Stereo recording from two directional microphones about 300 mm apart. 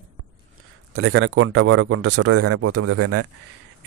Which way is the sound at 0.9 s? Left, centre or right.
Right.